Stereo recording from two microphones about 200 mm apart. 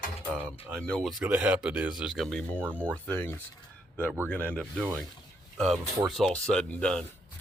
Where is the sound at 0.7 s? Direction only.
5° left (ahead or behind).